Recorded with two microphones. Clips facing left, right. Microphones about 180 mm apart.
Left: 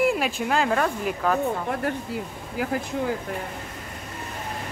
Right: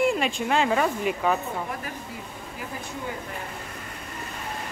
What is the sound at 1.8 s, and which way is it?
Speech, 75° left (ahead or behind).